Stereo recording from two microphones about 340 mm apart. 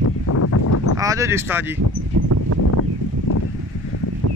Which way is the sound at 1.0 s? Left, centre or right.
Centre.